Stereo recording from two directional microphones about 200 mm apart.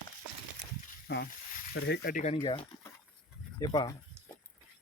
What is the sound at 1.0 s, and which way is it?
Speech, 55° left (ahead or behind).